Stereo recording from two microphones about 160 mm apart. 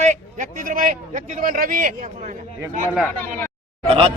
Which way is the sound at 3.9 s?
35° right (ahead or behind).